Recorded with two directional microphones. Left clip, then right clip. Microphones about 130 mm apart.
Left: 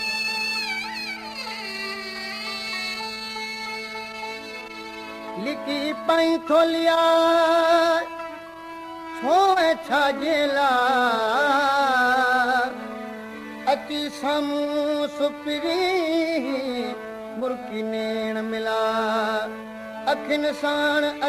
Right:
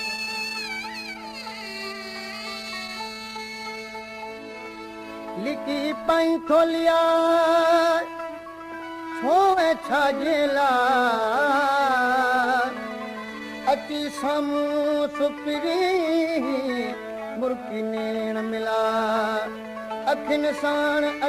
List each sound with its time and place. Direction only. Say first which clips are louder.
0.0 s music: left 3 dB; 35° right (ahead or behind)
5.4 s music: even; 35° right (ahead or behind)
9.2 s music: left 1 dB; 25° right (ahead or behind)